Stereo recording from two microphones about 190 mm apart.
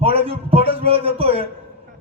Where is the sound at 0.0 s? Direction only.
30° right (ahead or behind).